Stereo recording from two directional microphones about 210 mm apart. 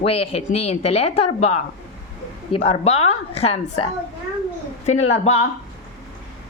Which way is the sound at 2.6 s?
30° left (ahead or behind).